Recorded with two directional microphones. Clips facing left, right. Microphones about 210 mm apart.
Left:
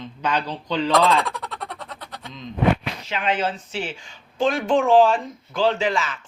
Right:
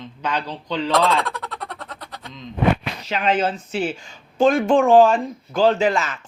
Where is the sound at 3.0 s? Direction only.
40° right (ahead or behind).